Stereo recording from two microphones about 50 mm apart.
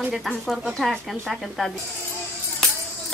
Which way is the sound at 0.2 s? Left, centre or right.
Centre.